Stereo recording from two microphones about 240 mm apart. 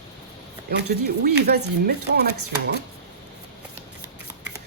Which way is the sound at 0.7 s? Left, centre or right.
Right.